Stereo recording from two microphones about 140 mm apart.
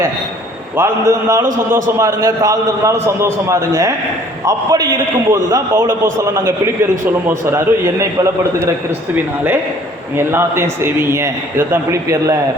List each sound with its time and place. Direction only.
0.8 s a man's voice: 20° right (ahead or behind)
10.2 s a man's voice: 15° right (ahead or behind)